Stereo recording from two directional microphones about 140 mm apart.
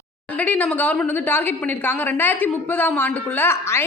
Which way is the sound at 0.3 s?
10° left (ahead or behind).